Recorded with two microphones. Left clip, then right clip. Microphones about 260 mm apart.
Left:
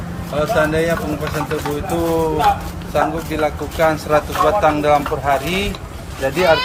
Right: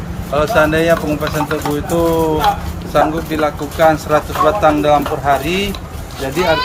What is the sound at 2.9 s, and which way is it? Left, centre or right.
Speech, centre.